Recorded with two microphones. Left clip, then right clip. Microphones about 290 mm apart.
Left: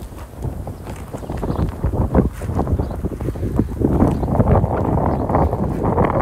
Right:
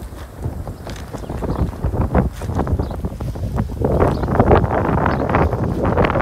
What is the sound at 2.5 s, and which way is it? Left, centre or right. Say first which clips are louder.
Boat: even; left.